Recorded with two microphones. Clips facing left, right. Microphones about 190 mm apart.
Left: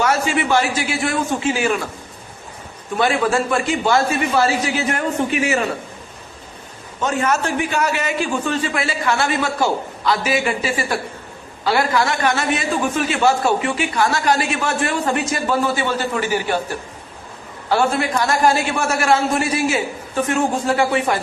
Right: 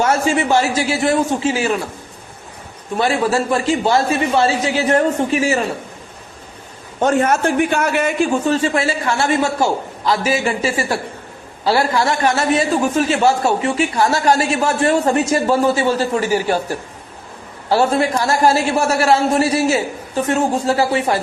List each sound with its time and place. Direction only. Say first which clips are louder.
0.3 s a man's voice: right 2 dB; 30° right (ahead or behind)
3.0 s a man's voice: right 1 dB; 30° right (ahead or behind)
7.0 s a man's voice: right 5 dB; 50° right (ahead or behind)
8.4 s a man's voice: right 5 dB; 30° right (ahead or behind)
10.6 s a man's voice: right 2 dB; 40° right (ahead or behind)
17.7 s a man's voice: right 3 dB; 30° right (ahead or behind)